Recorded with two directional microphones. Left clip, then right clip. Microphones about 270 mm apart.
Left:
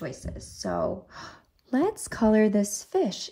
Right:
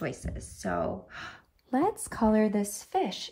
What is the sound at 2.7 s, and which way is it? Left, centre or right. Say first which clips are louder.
Speech: left 3 dB; left.